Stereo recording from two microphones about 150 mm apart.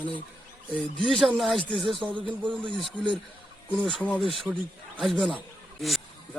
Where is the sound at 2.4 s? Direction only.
35° right (ahead or behind).